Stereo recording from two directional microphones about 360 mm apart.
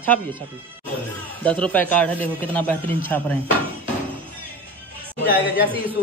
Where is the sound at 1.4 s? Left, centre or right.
Centre.